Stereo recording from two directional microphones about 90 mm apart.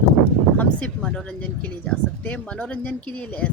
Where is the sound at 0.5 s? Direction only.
15° left (ahead or behind).